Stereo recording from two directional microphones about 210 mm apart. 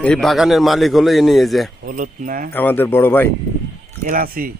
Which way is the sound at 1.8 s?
40° right (ahead or behind).